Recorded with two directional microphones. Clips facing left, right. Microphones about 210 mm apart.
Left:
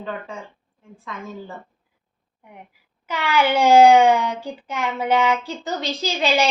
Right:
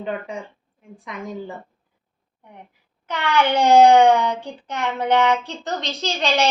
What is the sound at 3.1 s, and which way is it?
Speech, 5° left (ahead or behind).